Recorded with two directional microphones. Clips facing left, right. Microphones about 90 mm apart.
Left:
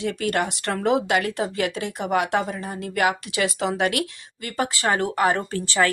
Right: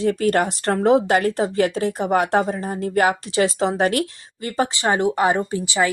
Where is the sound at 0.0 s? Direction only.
35° right (ahead or behind).